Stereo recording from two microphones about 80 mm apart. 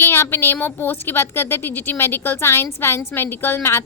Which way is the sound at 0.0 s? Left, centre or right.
Left.